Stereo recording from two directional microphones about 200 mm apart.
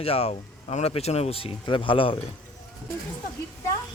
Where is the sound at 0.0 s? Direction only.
30° left (ahead or behind).